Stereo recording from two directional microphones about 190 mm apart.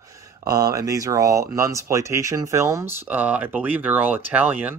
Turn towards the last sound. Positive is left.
turn(degrees=-10)  # may be behind; listen again after turning